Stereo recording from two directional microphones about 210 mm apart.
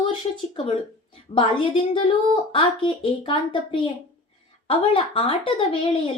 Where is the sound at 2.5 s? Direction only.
25° left (ahead or behind).